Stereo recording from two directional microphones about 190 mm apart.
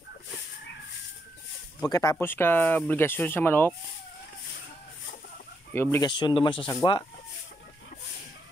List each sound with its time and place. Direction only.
1.9 s speech: 20° left (ahead or behind)
5.7 s speech: 10° left (ahead or behind)
6.0 s speech: 25° left (ahead or behind)